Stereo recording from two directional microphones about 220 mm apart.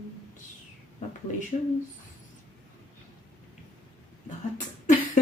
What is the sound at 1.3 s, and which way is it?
Speech, 35° left (ahead or behind).